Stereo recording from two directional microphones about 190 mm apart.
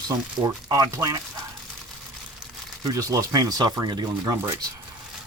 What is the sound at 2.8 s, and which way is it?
Speech, 20° right (ahead or behind).